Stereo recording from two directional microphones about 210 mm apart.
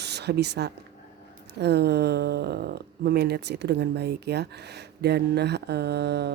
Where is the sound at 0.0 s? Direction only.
55° right (ahead or behind).